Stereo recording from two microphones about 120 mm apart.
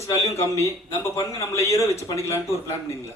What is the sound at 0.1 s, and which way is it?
A man's voice, 25° left (ahead or behind).